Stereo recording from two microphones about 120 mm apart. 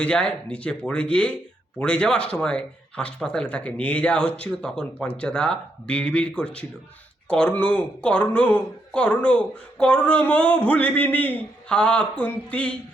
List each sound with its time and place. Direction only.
0.0 s speech: 10° left (ahead or behind)